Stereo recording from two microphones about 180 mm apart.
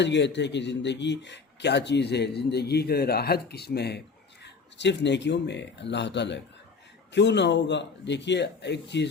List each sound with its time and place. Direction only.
0.0 s a man's voice: 75° left (ahead or behind)